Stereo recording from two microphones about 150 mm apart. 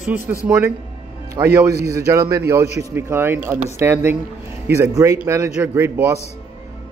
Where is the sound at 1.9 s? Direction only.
20° right (ahead or behind).